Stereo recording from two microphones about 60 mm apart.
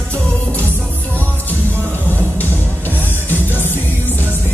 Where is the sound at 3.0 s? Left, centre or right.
Left.